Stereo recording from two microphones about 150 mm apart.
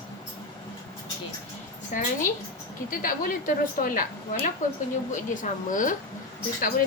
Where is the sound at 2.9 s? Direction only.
70° left (ahead or behind).